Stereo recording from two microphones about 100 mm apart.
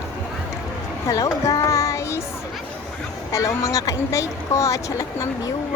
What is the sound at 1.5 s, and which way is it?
Child singing, 35° left (ahead or behind).